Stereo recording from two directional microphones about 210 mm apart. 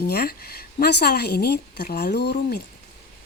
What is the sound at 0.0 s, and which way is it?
A woman's voice, 45° left (ahead or behind).